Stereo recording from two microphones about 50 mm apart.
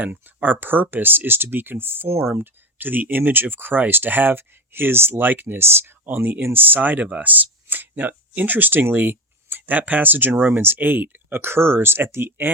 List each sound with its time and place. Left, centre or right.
0.0 s speech: right
11.3 s speech: right